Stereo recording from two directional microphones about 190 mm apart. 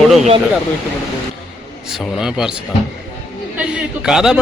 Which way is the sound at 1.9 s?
Centre (ahead or behind).